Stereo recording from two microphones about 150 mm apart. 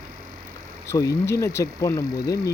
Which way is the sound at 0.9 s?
20° left (ahead or behind).